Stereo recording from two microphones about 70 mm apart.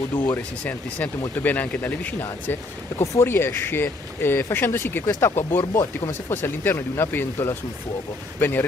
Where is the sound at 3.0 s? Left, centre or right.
Left.